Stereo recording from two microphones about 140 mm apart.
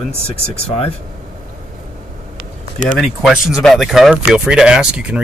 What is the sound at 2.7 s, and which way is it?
Speech, 65° left (ahead or behind).